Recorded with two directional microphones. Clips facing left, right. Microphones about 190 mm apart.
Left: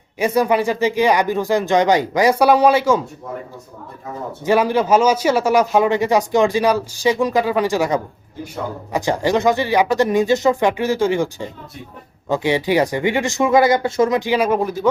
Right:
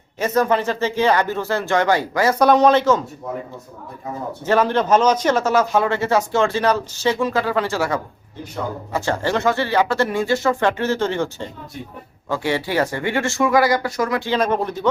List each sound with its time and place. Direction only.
0.2 s speech: 10° left (ahead or behind)
4.4 s speech: 10° left (ahead or behind)